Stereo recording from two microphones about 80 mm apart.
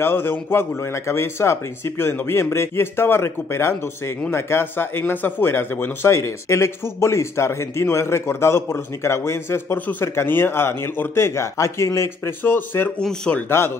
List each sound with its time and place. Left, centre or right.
0.0 s a man's voice: left
13.0 s speech: centre